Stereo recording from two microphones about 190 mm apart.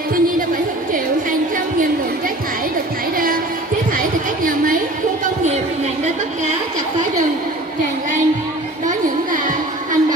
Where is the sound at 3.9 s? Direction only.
45° right (ahead or behind).